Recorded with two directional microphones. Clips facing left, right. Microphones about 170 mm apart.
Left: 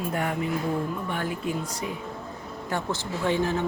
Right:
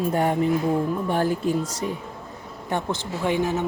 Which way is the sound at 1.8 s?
10° left (ahead or behind).